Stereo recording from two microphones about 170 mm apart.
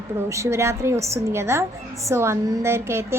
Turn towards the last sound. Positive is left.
turn(degrees=-15)  # may be behind; listen again after turning